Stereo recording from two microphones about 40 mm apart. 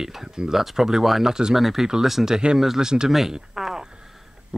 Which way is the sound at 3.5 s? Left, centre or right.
Centre.